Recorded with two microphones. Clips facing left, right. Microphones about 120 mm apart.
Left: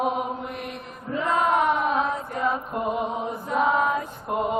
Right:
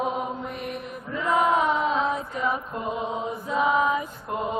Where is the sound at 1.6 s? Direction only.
65° left (ahead or behind).